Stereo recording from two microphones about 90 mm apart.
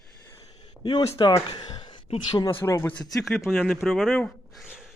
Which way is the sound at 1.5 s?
50° left (ahead or behind).